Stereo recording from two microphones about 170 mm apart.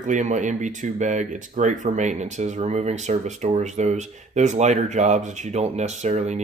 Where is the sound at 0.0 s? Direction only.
45° right (ahead or behind).